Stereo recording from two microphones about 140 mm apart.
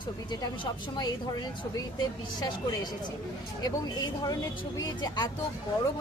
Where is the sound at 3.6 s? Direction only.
30° left (ahead or behind).